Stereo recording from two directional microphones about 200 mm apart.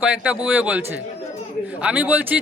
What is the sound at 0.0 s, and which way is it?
Speech, 5° right (ahead or behind).